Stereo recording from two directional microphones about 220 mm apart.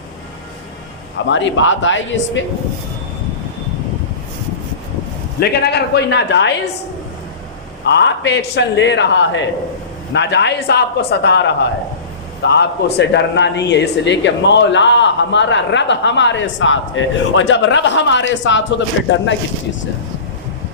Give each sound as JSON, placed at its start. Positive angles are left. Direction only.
{"t": 1.3, "sound": "speech", "side_deg": 55}
{"t": 5.4, "sound": "speech", "side_deg": 50}
{"t": 7.9, "sound": "speech", "side_deg": 50}